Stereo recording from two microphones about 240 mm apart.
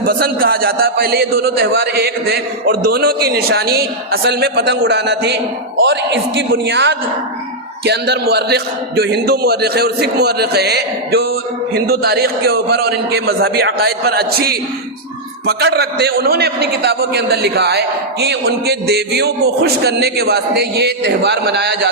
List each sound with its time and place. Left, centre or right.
0.0 s a man's voice: right